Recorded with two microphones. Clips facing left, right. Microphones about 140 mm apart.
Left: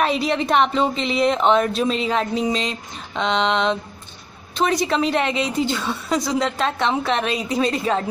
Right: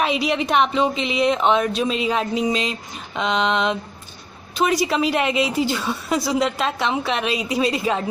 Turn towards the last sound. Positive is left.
turn(degrees=-5)  # may be behind; listen again after turning